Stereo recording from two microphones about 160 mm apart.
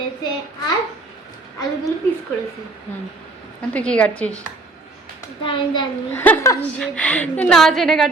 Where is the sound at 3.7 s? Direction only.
10° left (ahead or behind).